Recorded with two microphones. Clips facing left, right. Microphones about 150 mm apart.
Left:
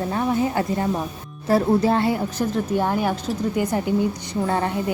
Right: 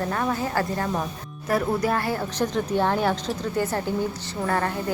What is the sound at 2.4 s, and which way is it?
A woman's voice, 5° left (ahead or behind).